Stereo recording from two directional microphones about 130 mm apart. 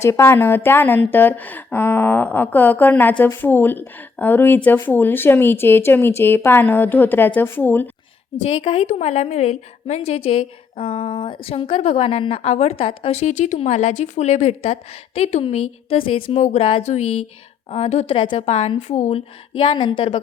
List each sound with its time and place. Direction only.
0.0 s a woman's voice: 20° left (ahead or behind)
8.6 s a woman's voice: 45° left (ahead or behind)
8.9 s a woman's voice: 60° left (ahead or behind)
16.8 s speech: 60° left (ahead or behind)
17.7 s a woman's voice: 50° left (ahead or behind)
18.8 s speech: 60° left (ahead or behind)
19.5 s a woman's voice: 40° left (ahead or behind)